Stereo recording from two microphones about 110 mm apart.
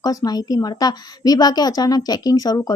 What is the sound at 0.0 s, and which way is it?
A woman's voice, 35° left (ahead or behind).